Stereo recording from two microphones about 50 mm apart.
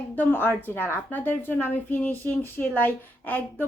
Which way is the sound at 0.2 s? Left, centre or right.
Left.